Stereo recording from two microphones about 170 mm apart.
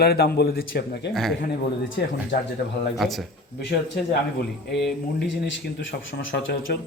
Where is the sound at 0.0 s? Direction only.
70° left (ahead or behind).